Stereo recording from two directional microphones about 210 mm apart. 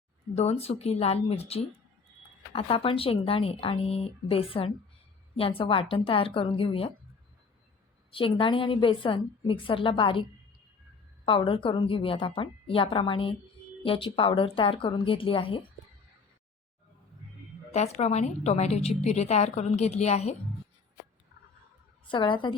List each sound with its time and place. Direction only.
0.3 s speech: 30° left (ahead or behind)
8.1 s speech: 25° left (ahead or behind)
11.3 s speech: 25° left (ahead or behind)
17.7 s a woman's voice: 30° left (ahead or behind)
22.0 s speech: 25° left (ahead or behind)